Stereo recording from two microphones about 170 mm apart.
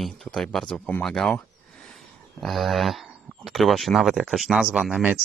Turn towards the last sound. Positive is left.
turn(degrees=-5)  # may be behind; listen again after turning